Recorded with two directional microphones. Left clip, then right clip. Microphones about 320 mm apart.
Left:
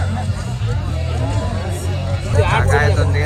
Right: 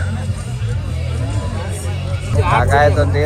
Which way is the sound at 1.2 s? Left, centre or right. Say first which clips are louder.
Left 2 dB; left.